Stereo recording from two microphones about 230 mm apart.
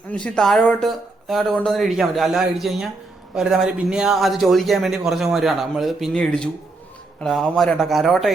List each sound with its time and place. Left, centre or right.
0.1 s speech: centre